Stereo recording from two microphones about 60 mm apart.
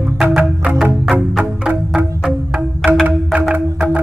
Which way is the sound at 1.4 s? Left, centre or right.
Right.